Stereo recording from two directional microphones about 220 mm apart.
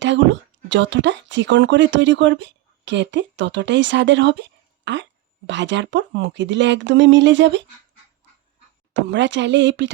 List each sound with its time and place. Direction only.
0.0 s speech: 55° right (ahead or behind)
8.9 s speech: 55° right (ahead or behind)